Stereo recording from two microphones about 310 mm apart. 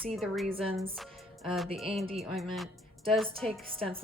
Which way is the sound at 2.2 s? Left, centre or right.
Centre.